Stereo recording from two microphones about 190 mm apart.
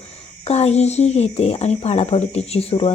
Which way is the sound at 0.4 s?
35° left (ahead or behind).